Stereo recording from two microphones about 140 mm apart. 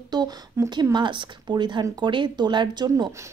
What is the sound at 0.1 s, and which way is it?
A woman's voice, 30° right (ahead or behind).